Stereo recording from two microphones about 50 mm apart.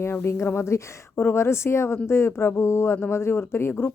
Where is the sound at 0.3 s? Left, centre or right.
Left.